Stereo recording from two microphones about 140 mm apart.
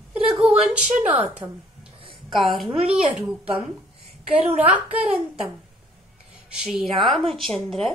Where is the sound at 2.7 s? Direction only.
45° right (ahead or behind).